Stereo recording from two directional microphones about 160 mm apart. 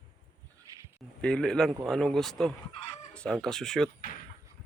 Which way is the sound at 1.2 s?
5° left (ahead or behind).